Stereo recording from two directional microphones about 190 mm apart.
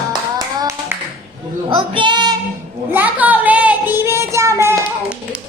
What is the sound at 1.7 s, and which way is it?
Female singing, 25° right (ahead or behind).